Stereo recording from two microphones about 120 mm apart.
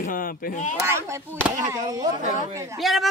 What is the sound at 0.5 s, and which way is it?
Speech, 90° left.